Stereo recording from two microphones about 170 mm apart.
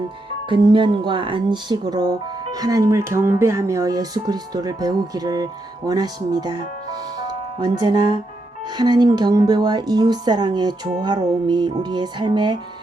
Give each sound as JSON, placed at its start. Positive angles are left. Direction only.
{"t": 0.4, "sound": "speech", "side_deg": -30}
{"t": 7.6, "sound": "speech", "side_deg": -25}